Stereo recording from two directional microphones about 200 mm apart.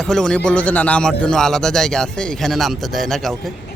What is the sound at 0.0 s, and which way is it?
Speech, 5° left (ahead or behind).